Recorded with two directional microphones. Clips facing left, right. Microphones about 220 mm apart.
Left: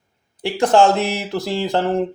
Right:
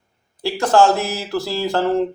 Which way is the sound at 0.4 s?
20° left (ahead or behind).